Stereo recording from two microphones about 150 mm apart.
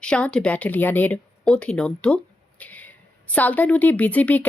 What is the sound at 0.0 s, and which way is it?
Speech, 5° left (ahead or behind).